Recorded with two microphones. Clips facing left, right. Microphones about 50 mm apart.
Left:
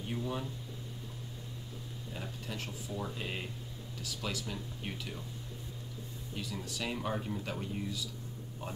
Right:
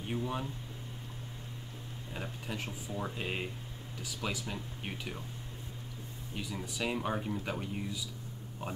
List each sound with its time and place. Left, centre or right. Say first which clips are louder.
0.1 s speech: right 2 dB; right
2.1 s speech: right 2 dB; right
6.3 s speech: right 1 dB; centre